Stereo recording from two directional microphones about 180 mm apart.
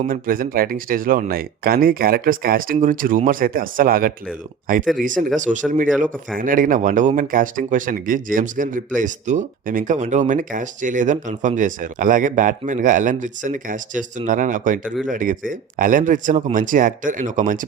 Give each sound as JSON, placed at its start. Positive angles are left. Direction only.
{"t": 0.1, "sound": "speech", "side_deg": -50}